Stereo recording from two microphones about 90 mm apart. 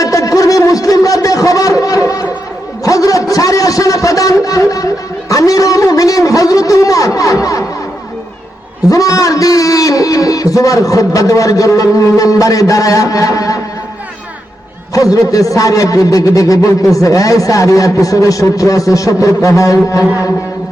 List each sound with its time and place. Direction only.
0.0 s a sound: 40° left (ahead or behind)
8.9 s a man's voice: 40° left (ahead or behind)
14.9 s a man's voice: 40° left (ahead or behind)